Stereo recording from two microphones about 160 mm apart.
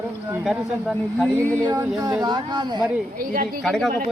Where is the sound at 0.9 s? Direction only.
10° left (ahead or behind).